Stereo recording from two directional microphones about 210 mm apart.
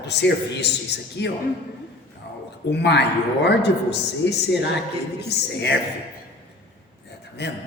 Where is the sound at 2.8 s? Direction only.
55° left (ahead or behind).